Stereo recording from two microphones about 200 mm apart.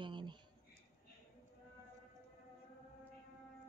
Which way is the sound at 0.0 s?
25° right (ahead or behind).